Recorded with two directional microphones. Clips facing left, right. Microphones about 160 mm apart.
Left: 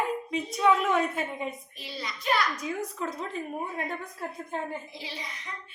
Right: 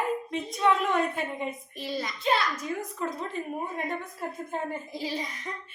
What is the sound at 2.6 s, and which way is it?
Speech, centre (ahead or behind).